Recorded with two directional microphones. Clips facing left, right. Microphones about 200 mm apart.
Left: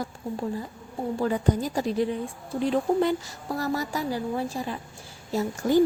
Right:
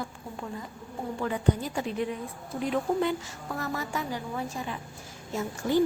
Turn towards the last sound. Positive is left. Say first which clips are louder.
# left 4 dB
turn(degrees=35)  # may be behind; listen again after turning